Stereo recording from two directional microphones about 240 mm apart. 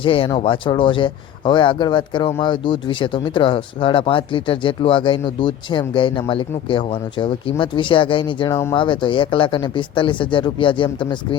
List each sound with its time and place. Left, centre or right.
0.0 s speech: left